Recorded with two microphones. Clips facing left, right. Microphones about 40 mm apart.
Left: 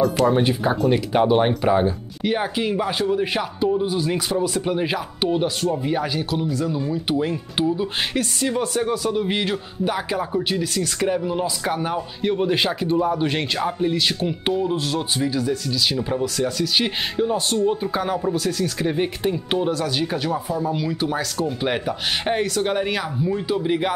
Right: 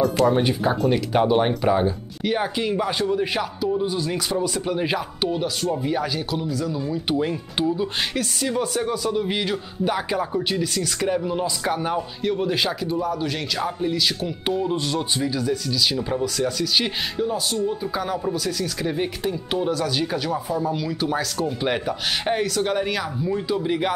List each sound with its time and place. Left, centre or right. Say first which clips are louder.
0.0 s speech: left 1 dB; centre
5.3 s speech: left 6 dB; left
5.9 s speech: left 1 dB; centre
6.9 s speech: left 1 dB; centre
12.2 s speech: left 4 dB; centre
13.7 s speech: left 1 dB; centre
14.5 s speech: even; centre
17.2 s speech: left 4 dB; left; by 23.9 s centre